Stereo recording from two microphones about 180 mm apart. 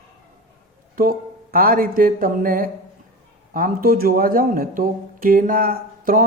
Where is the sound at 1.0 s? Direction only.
55° right (ahead or behind).